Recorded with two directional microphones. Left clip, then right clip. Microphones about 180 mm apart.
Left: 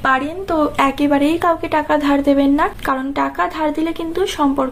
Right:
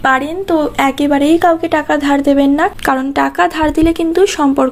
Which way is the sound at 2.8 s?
45° right (ahead or behind).